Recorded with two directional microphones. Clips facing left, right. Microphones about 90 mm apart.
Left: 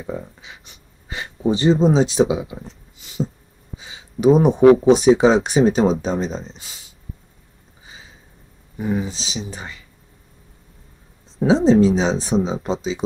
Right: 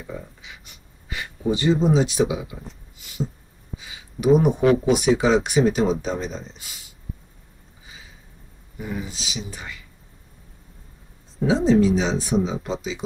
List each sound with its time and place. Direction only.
0.0 s speech: 30° left (ahead or behind)
3.0 s beatboxing: 25° left (ahead or behind)
3.7 s speech: 25° left (ahead or behind)
8.7 s speech: 30° left (ahead or behind)
11.3 s speech: 25° left (ahead or behind)